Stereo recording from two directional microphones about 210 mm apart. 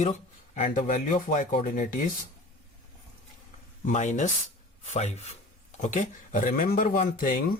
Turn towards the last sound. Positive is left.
turn(degrees=40)  # may be behind; listen again after turning